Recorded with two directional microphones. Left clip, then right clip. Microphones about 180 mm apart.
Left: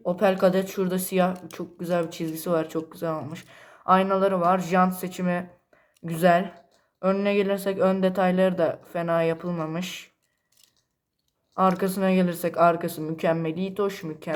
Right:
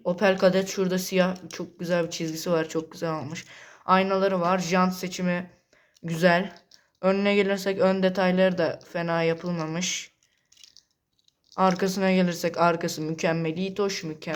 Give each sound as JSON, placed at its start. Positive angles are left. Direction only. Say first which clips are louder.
{"t": 0.0, "sound": "speech", "louder": "even", "side_deg": -30}
{"t": 11.5, "sound": "speech", "louder": "left 1 dB", "side_deg": -30}